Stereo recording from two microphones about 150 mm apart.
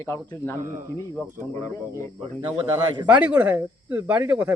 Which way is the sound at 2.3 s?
15° right (ahead or behind).